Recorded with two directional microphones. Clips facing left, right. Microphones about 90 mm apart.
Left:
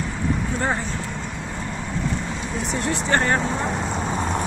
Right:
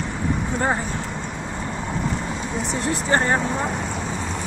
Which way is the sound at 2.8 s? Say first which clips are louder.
Right 1 dB; 25° right (ahead or behind).